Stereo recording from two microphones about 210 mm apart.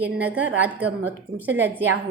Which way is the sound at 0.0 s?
5° right (ahead or behind).